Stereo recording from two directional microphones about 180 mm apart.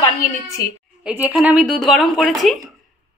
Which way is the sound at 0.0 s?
20° left (ahead or behind).